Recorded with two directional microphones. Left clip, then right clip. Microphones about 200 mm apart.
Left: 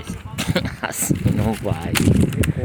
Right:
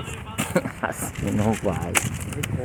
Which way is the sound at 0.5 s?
15° left (ahead or behind).